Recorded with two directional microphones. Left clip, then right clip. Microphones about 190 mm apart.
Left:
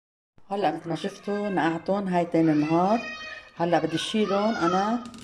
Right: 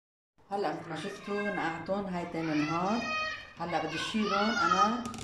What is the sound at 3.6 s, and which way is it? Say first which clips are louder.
Speech: left 9 dB; 50° left (ahead or behind).